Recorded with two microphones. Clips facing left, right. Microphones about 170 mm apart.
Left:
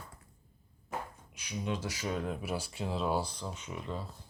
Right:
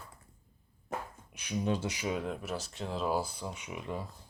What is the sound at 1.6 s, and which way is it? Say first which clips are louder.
Speech: right 3 dB; 35° right (ahead or behind).